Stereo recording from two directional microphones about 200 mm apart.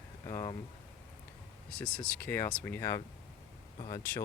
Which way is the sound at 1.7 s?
5° left (ahead or behind).